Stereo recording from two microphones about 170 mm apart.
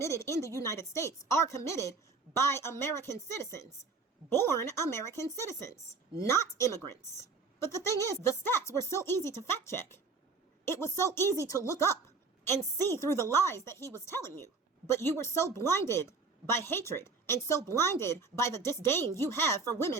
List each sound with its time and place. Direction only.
0.0 s a woman's voice: 15° left (ahead or behind)